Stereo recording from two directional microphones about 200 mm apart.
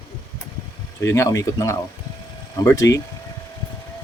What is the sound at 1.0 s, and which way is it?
Speech, 15° left (ahead or behind).